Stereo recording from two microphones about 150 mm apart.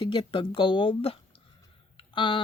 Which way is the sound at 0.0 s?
35° left (ahead or behind).